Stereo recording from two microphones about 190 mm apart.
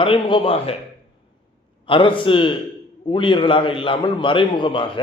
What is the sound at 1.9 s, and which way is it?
A man's voice, 25° left (ahead or behind).